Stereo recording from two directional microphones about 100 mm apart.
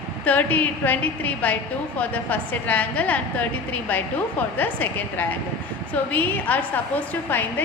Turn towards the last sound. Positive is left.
turn(degrees=20)  # may be behind; listen again after turning